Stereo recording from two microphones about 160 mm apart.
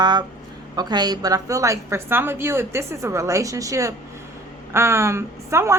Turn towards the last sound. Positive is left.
turn(degrees=-15)  # may be behind; listen again after turning